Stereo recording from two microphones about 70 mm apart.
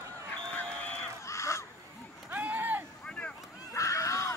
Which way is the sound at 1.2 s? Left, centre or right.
Left.